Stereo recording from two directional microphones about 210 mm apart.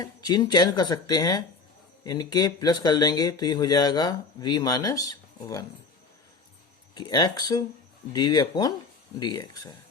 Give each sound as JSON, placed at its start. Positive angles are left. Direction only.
{"t": 0.0, "sound": "speech", "side_deg": 20}
{"t": 6.9, "sound": "speech", "side_deg": 20}